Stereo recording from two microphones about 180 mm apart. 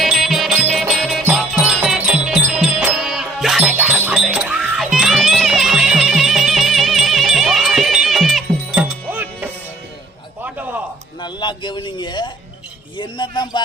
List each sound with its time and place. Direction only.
0.0 s music: centre (ahead or behind)
11.2 s a sound: 25° left (ahead or behind)
13.0 s a man's voice: 25° left (ahead or behind)